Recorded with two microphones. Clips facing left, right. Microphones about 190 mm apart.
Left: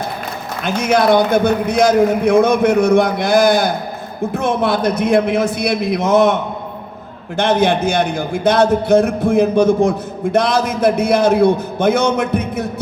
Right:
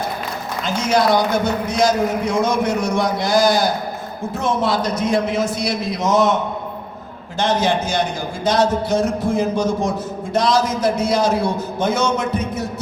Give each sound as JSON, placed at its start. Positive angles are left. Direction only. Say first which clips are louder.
{"t": 0.6, "sound": "a man's voice", "louder": "left 3 dB", "side_deg": 60}